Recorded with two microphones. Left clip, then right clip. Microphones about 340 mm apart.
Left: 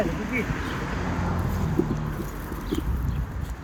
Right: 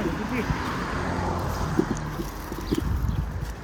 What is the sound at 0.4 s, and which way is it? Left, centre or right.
Vehicle, right.